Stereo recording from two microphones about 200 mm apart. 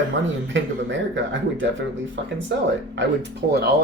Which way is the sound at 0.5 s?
65° right (ahead or behind).